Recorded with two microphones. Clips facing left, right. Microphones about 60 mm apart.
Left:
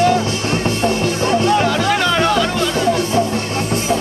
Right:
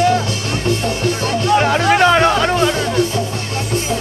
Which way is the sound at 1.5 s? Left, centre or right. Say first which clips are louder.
Right 2 dB; right.